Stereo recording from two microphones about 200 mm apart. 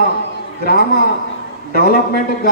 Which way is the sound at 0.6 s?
50° left (ahead or behind).